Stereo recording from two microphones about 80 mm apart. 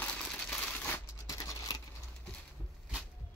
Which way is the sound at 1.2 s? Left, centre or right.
Left.